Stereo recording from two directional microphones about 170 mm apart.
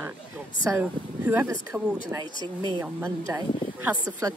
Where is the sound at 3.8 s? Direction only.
15° right (ahead or behind).